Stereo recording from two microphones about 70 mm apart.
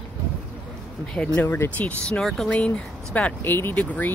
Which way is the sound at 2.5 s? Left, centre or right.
Centre.